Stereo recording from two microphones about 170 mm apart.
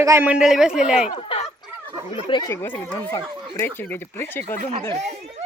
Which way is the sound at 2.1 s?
30° left (ahead or behind).